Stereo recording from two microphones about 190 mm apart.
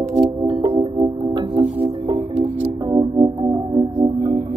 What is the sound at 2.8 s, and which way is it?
Music, 20° right (ahead or behind).